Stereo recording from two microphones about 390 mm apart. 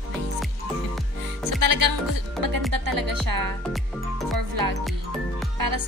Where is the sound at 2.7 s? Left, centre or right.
Right.